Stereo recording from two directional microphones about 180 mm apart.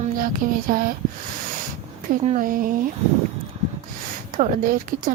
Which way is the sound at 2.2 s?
45° right (ahead or behind).